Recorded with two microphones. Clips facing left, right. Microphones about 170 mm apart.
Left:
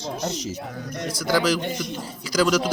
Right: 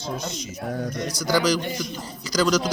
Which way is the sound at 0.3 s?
75° left (ahead or behind).